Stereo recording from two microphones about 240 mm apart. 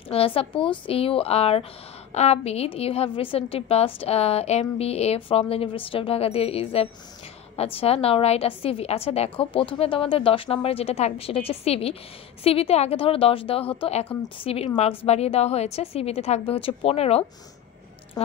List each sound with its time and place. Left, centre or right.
0.1 s a woman's voice: left